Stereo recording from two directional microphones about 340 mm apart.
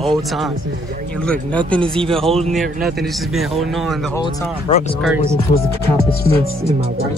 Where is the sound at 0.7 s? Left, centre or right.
Right.